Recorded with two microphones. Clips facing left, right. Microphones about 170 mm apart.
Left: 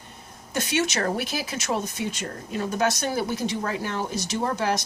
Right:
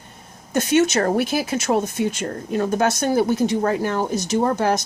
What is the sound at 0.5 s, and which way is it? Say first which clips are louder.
Speech: right 8 dB; 45° right (ahead or behind).